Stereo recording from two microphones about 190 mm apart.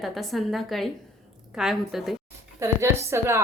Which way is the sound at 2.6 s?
15° right (ahead or behind).